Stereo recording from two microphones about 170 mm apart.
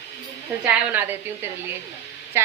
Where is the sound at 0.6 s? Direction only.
10° right (ahead or behind).